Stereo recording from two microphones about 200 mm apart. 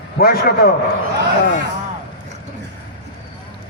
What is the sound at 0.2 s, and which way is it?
Speech, 50° left (ahead or behind).